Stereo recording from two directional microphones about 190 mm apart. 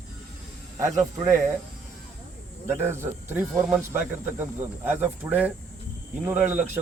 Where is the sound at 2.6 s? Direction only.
15° right (ahead or behind).